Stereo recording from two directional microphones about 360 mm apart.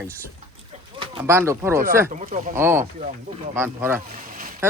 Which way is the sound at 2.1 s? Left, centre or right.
Right.